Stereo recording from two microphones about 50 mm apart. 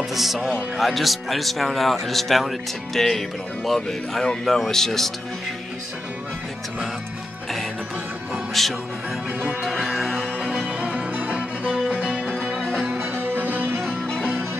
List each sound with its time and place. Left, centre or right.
0.1 s speech: centre
8.6 s speech: centre
9.7 s music: centre
10.8 s music: right
12.3 s music: centre
12.9 s music: right
13.7 s music: centre